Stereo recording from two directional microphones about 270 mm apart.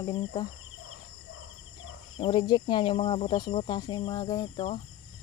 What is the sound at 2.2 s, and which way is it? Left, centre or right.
Speech, centre.